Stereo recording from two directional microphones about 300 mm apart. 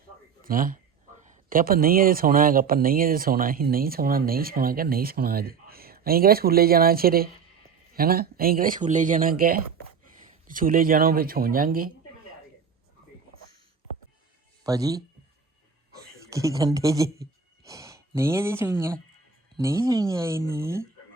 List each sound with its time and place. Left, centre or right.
0.4 s speech: right
14.6 s speech: centre